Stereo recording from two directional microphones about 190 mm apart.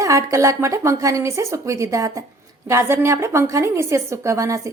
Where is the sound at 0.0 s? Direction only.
15° right (ahead or behind).